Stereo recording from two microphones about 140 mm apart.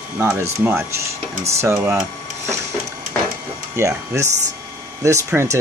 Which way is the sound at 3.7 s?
20° right (ahead or behind).